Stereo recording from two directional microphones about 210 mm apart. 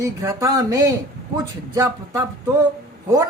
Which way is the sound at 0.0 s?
15° right (ahead or behind).